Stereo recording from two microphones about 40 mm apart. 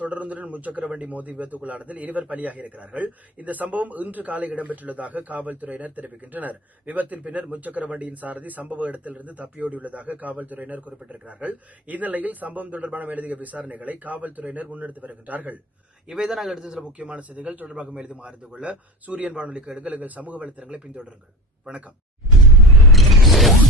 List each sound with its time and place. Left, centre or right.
0.0 s speech: right
16.2 s a man's voice: centre
16.7 s a man's voice: right
17.8 s a man's voice: right
18.6 s speech: right
22.8 s mechanisms: centre